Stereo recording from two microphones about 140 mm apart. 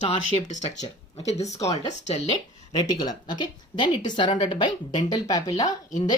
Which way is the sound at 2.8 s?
30° left (ahead or behind).